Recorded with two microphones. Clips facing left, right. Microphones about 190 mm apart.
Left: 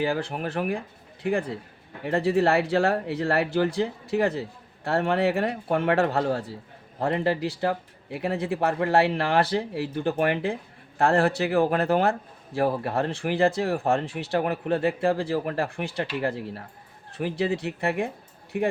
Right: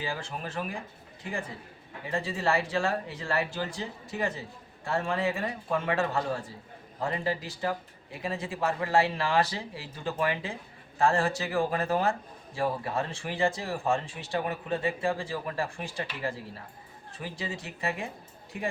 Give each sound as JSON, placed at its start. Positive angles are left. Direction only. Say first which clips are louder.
{"t": 0.0, "sound": "speech", "louder": "left 9 dB", "side_deg": 60}